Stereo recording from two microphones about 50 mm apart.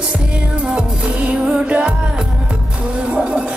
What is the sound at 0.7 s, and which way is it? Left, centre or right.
Music, right.